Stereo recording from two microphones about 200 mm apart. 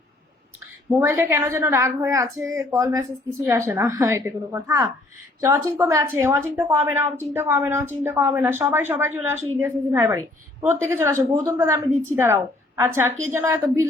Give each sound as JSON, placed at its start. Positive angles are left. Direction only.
{"t": 0.9, "sound": "a woman's voice", "side_deg": -15}